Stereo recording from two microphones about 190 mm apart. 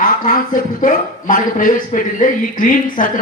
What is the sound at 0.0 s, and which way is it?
Speech, 45° left (ahead or behind).